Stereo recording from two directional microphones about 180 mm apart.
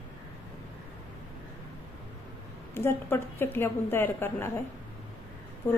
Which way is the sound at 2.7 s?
15° left (ahead or behind).